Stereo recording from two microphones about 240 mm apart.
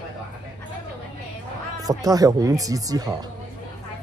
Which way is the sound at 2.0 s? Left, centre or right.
Centre.